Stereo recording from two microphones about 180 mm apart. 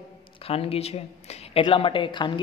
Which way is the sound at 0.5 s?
35° left (ahead or behind).